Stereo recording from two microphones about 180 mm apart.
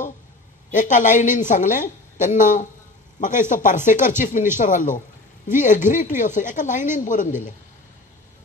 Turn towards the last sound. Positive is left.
turn(degrees=45)  # may be behind; listen again after turning